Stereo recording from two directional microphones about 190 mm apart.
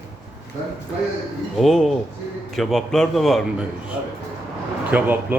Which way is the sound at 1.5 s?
Centre (ahead or behind).